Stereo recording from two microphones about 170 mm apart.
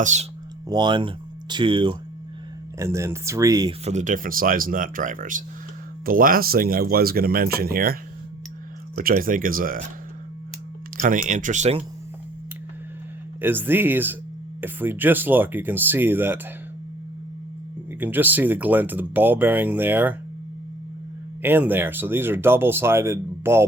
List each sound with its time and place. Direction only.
0.0 s speech: 45° right (ahead or behind)
0.7 s speech: 25° right (ahead or behind)
2.7 s speech: 15° right (ahead or behind)
3.8 s speech: 45° right (ahead or behind)
9.0 s speech: 60° right (ahead or behind)
10.9 s speech: 50° right (ahead or behind)
13.4 s speech: 10° right (ahead or behind)
18.0 s speech: 10° right (ahead or behind)
21.4 s speech: 10° right (ahead or behind)